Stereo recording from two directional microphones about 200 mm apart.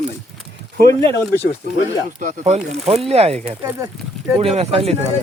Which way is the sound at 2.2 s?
35° right (ahead or behind).